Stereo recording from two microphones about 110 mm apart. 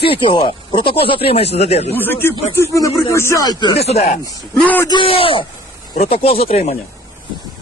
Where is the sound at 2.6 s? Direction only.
30° left (ahead or behind).